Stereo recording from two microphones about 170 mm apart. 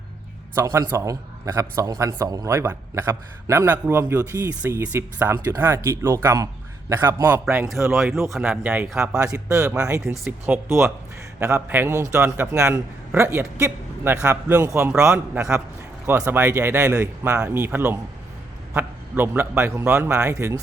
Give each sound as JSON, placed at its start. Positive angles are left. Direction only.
{"t": 0.5, "sound": "a man's voice", "side_deg": -15}
{"t": 7.9, "sound": "a man's voice", "side_deg": 0}
{"t": 9.3, "sound": "a man's voice", "side_deg": -15}
{"t": 10.1, "sound": "a man's voice", "side_deg": -5}